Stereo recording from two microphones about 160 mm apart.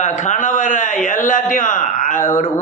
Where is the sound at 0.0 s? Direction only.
50° left (ahead or behind).